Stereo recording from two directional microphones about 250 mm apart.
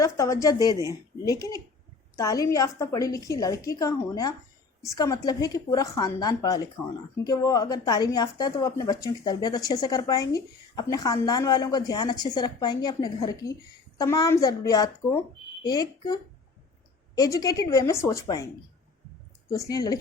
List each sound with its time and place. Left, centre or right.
0.0 s a woman's voice: centre
19.5 s a woman's voice: centre